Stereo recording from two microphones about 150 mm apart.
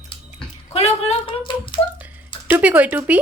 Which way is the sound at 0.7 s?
45° left (ahead or behind).